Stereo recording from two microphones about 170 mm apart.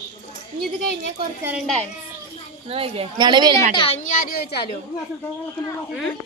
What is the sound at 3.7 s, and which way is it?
Speech, 30° left (ahead or behind).